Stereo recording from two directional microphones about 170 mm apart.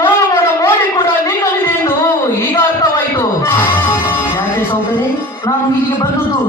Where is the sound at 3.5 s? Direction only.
10° left (ahead or behind).